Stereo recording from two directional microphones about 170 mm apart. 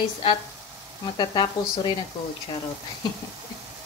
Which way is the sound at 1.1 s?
25° left (ahead or behind).